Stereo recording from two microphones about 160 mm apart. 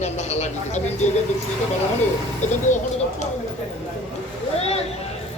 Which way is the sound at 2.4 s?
45° left (ahead or behind).